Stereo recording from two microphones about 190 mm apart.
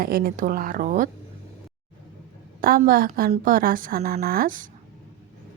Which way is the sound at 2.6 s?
50° right (ahead or behind).